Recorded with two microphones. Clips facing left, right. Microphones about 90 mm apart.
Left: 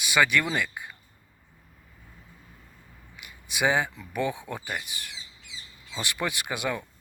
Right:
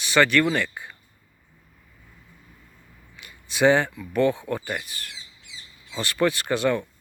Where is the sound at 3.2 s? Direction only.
10° left (ahead or behind).